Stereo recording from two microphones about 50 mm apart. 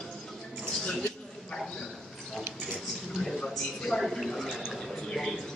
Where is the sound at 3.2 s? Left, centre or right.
Centre.